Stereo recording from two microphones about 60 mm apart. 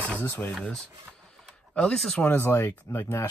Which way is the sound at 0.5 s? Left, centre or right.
Centre.